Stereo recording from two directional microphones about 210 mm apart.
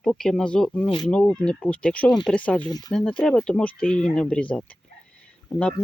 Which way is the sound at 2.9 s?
5° left (ahead or behind).